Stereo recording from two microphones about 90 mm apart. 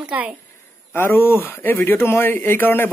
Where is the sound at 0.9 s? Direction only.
25° left (ahead or behind).